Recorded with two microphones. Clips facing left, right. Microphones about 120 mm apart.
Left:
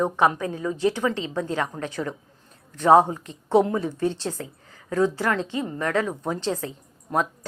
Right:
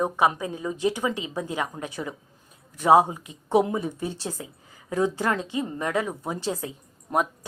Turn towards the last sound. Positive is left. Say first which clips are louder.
# even
turn(degrees=-20)  # may be behind; listen again after turning